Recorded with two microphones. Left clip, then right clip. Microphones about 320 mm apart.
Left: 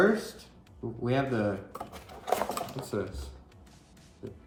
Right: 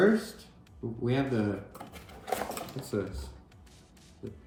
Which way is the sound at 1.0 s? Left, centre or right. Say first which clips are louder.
Left 2 dB; centre.